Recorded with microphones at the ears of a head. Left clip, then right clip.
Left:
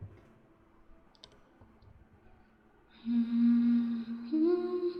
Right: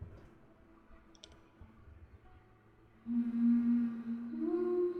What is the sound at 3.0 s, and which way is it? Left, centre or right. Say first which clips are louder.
Whale vocalization: left 4 dB; left.